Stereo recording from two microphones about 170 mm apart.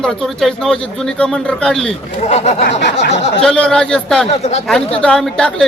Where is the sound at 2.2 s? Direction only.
40° left (ahead or behind).